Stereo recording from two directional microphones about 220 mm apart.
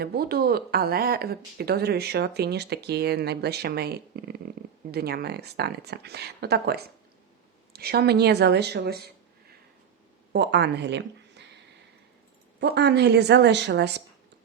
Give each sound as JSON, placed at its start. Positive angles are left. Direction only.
{"t": 0.0, "sound": "speech", "side_deg": -45}
{"t": 10.3, "sound": "a woman's voice", "side_deg": -50}
{"t": 12.5, "sound": "speech", "side_deg": -50}